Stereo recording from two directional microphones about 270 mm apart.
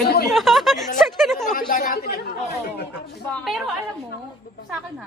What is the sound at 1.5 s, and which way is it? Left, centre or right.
Speech, left.